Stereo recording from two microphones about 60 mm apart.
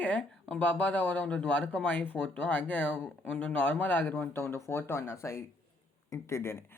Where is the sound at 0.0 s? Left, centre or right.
Left.